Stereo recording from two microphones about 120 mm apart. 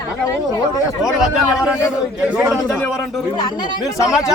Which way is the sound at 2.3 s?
10° right (ahead or behind).